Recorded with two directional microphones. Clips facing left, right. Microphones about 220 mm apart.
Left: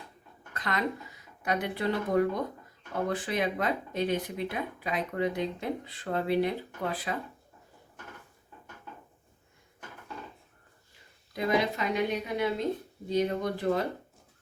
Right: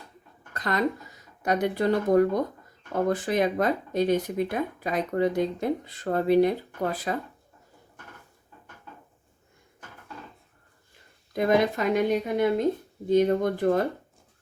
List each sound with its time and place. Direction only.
0.5 s speech: 40° right (ahead or behind)
11.3 s speech: 50° right (ahead or behind)